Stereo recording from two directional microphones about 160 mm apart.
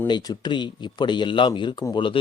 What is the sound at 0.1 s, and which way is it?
Speech, 25° left (ahead or behind).